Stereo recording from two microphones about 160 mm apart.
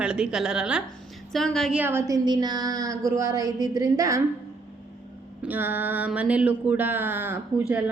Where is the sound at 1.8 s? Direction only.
15° right (ahead or behind).